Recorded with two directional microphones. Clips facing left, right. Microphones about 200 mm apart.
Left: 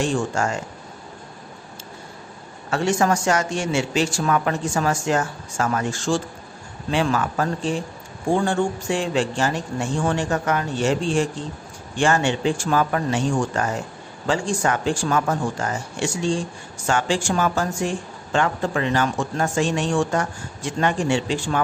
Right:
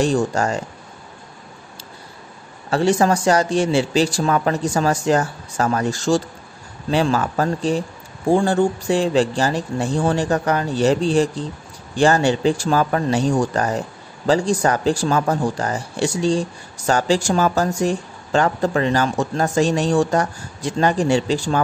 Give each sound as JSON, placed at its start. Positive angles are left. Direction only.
{"t": 0.0, "sound": "speech", "side_deg": -35}
{"t": 2.7, "sound": "speech", "side_deg": -35}